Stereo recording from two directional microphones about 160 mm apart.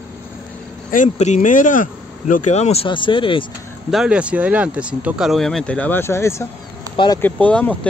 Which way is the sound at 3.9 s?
5° right (ahead or behind).